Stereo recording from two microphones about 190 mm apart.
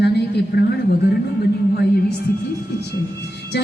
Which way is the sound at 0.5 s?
55° left (ahead or behind).